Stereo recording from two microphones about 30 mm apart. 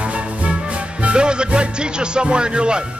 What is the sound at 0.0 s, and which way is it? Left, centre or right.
Music, right.